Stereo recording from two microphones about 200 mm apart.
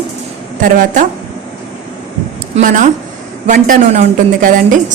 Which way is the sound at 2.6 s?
40° right (ahead or behind).